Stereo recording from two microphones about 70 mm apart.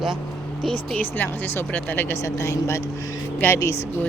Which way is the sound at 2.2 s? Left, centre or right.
Left.